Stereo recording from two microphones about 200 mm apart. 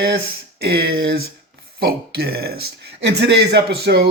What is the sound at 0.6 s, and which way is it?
A man's voice, 50° right (ahead or behind).